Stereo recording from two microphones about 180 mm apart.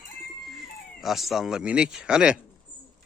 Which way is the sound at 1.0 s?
Centre (ahead or behind).